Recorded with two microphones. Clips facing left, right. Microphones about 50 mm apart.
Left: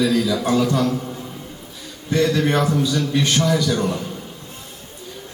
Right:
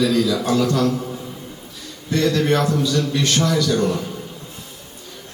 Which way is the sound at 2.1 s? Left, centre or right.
Centre.